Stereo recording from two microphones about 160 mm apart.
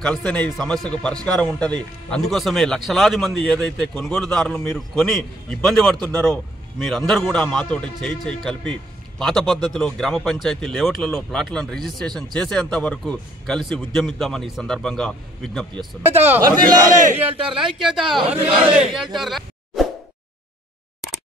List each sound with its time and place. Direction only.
0.0 s a man's voice: 5° left (ahead or behind)
16.3 s a man's voice: 15° right (ahead or behind)
16.9 s speech: 55° right (ahead or behind)
17.3 s speech: 35° right (ahead or behind)
17.6 s a man's voice: centre (ahead or behind)
19.1 s a sound: centre (ahead or behind)